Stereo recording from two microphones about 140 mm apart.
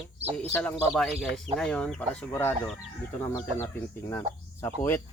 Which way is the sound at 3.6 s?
20° left (ahead or behind).